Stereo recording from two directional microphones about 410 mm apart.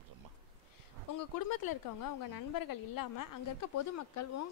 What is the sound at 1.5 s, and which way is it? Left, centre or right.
A woman's voice, left.